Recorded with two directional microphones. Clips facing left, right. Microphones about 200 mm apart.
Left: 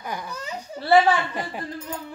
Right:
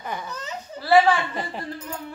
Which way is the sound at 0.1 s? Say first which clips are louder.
Even; 10° left (ahead or behind).